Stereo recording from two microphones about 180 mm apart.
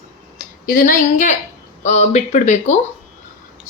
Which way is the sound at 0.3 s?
50° left (ahead or behind).